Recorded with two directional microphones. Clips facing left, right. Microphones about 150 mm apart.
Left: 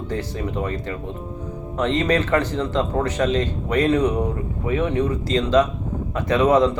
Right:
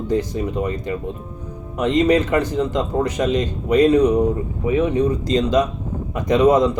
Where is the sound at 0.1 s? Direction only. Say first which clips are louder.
Right 6 dB; 15° right (ahead or behind).